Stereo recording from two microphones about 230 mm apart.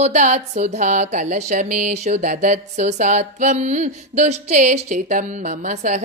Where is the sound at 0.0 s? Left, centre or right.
Right.